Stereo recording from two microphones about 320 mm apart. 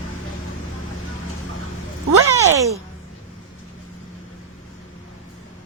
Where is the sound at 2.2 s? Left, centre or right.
Centre.